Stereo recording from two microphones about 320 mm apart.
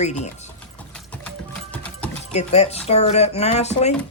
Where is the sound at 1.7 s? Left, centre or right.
Centre.